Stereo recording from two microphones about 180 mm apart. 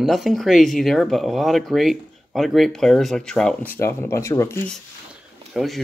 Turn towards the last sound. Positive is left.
turn(degrees=0)  # may be behind; listen again after turning